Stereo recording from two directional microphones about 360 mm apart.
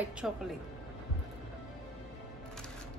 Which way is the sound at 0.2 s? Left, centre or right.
Centre.